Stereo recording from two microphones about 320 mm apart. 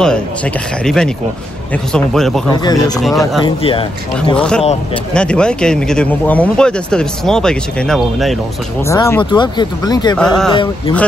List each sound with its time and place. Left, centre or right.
0.8 s speech: centre
2.5 s speech: centre
3.0 s speech: centre
3.4 s speech: centre
4.4 s speech: centre
10.5 s speech: centre